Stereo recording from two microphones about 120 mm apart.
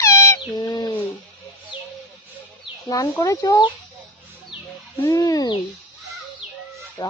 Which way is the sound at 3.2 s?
30° left (ahead or behind).